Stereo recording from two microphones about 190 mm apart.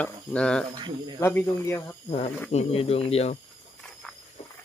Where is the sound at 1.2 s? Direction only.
10° left (ahead or behind).